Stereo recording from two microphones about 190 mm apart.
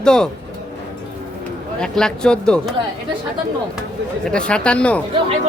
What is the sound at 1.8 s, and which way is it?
Speech, 5° left (ahead or behind).